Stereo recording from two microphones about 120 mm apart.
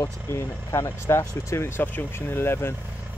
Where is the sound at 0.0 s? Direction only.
25° left (ahead or behind).